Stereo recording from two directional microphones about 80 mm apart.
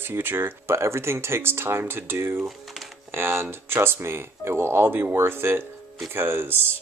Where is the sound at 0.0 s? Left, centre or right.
Right.